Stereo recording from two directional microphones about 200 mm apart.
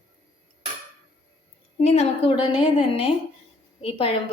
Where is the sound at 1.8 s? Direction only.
30° left (ahead or behind).